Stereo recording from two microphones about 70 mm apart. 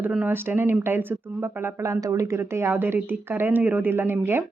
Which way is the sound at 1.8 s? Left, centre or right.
Right.